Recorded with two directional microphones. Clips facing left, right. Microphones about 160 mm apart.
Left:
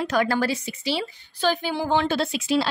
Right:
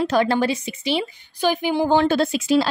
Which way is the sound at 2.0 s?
45° right (ahead or behind).